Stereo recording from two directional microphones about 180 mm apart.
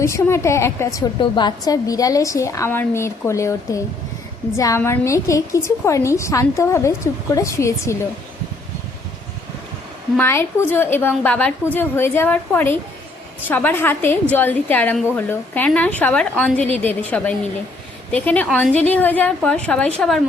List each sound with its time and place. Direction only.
0.0 s a woman's voice: 15° left (ahead or behind)
10.2 s a woman's voice: 15° left (ahead or behind)